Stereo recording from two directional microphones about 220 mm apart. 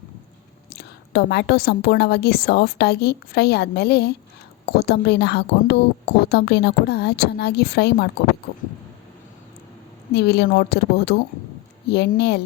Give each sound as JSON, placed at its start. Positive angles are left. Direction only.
{"t": 0.7, "sound": "a woman's voice", "side_deg": 45}
{"t": 10.2, "sound": "a woman's voice", "side_deg": 50}